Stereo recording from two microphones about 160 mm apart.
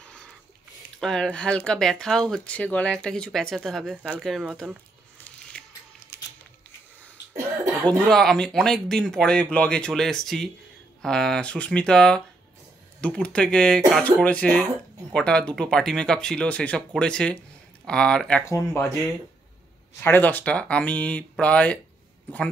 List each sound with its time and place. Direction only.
0.0 s a sound: 5° left (ahead or behind)
0.9 s speech: 5° left (ahead or behind)
5.5 s music: 10° left (ahead or behind)
7.3 s cough: 20° right (ahead or behind)
8.1 s speech: 5° left (ahead or behind)
18.4 s speech: 15° left (ahead or behind)
20.0 s speech: 10° left (ahead or behind)